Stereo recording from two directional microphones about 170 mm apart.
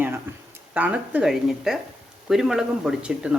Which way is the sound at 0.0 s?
10° right (ahead or behind).